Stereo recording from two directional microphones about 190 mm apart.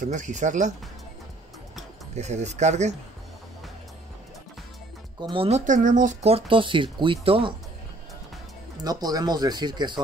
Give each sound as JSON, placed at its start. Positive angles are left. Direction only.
{"t": 0.0, "sound": "speech", "side_deg": -40}
{"t": 2.1, "sound": "speech", "side_deg": -35}
{"t": 5.2, "sound": "speech", "side_deg": -30}
{"t": 8.8, "sound": "speech", "side_deg": -20}